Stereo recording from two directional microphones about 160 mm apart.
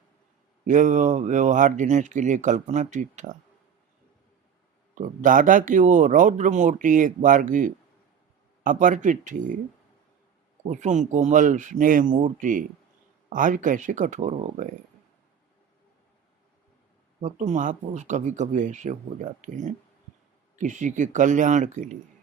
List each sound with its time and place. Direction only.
0.7 s speech: 50° right (ahead or behind)
4.9 s speech: 55° right (ahead or behind)
10.6 s speech: 50° right (ahead or behind)
17.2 s speech: 50° right (ahead or behind)